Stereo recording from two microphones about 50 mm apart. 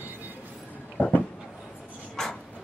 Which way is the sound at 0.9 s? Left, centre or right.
Left.